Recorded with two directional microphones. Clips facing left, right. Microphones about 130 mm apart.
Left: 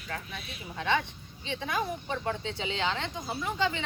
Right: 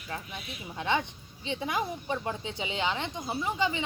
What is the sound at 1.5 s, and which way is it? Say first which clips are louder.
Speech: right 1 dB; 20° right (ahead or behind).